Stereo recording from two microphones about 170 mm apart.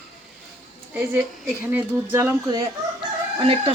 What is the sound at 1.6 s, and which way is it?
Speech, 15° right (ahead or behind).